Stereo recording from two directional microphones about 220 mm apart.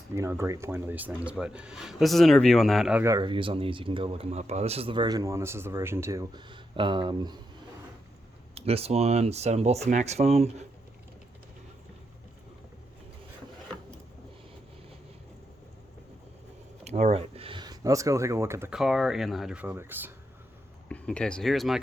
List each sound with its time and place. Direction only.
0.1 s speech: 10° right (ahead or behind)
8.5 s speech: 25° right (ahead or behind)
16.8 s speech: 30° right (ahead or behind); by 20.1 s 10° right (ahead or behind)
20.9 s speech: 5° left (ahead or behind)